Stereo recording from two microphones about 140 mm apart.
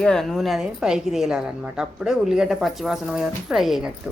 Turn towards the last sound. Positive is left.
turn(degrees=0)  # may be behind; listen again after turning